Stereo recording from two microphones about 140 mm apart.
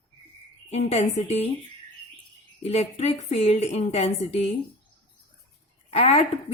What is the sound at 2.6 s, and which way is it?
A woman's voice, 50° left (ahead or behind).